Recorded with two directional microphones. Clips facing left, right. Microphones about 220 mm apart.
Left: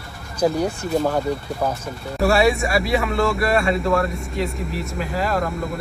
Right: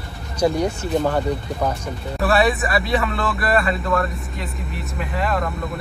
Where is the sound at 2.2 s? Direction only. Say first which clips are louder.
Left 1 dB; centre (ahead or behind).